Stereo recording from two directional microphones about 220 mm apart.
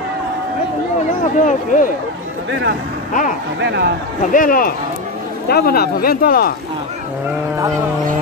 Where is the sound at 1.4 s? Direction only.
35° left (ahead or behind).